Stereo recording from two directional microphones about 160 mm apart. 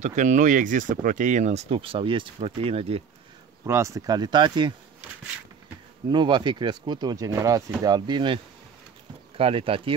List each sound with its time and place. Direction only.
0.0 s speech: 50° right (ahead or behind)
3.6 s speech: 20° right (ahead or behind)
6.1 s speech: 30° right (ahead or behind)
9.4 s speech: 35° right (ahead or behind)